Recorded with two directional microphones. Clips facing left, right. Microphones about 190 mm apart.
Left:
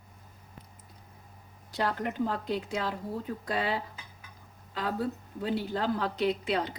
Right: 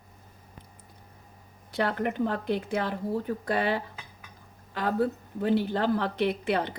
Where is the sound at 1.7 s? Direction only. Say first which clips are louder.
Right 3 dB; 60° right (ahead or behind).